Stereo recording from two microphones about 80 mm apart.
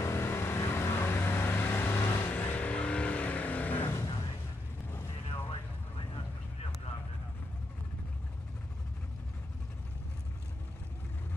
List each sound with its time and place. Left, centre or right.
0.0 s vehicle: left
3.8 s vehicle: left
5.5 s vehicle: left